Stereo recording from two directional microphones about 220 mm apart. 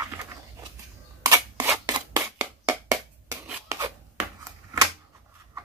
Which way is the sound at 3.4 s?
5° right (ahead or behind).